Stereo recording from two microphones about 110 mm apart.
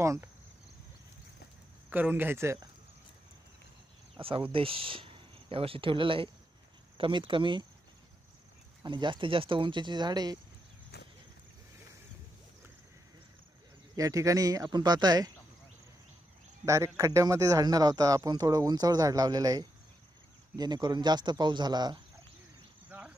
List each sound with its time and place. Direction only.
0.0 s speech: 25° right (ahead or behind)
1.9 s speech: 15° right (ahead or behind)
4.2 s speech: 55° right (ahead or behind)
8.8 s speech: 45° right (ahead or behind)
13.9 s speech: 30° right (ahead or behind)
16.6 s speech: 25° right (ahead or behind)
22.8 s cricket: 15° right (ahead or behind)